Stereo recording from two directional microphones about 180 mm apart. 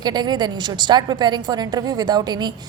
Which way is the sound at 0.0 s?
25° right (ahead or behind).